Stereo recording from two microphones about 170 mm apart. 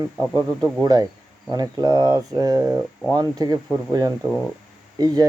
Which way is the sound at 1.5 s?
20° right (ahead or behind).